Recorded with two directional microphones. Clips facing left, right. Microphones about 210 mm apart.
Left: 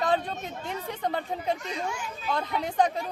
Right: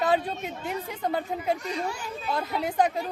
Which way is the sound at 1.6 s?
35° right (ahead or behind).